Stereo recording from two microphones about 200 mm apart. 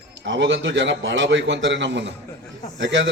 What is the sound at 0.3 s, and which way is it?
A man's voice, 65° right (ahead or behind).